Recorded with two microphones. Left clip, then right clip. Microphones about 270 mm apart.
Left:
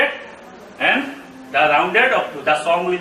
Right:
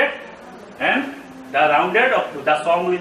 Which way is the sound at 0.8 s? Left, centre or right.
Centre.